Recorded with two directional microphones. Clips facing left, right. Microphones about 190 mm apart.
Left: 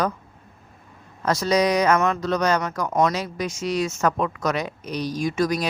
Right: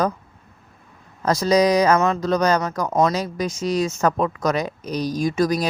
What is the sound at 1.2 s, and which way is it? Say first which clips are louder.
Speech: right 3 dB; 35° right (ahead or behind).